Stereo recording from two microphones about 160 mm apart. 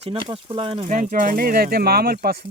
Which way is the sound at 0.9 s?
55° right (ahead or behind).